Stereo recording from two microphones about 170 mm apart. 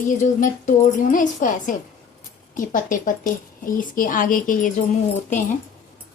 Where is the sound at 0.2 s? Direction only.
50° left (ahead or behind).